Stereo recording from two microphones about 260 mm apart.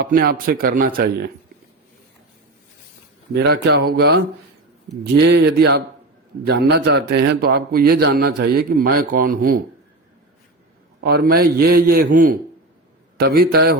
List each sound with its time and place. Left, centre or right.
0.0 s a man's voice: right
3.3 s a man's voice: right
5.2 s a man's voice: right
11.0 s a man's voice: right